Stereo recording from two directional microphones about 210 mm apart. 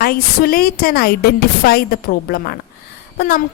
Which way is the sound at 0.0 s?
45° left (ahead or behind).